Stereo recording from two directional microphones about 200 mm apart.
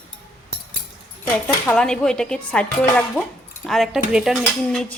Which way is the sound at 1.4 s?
5° left (ahead or behind).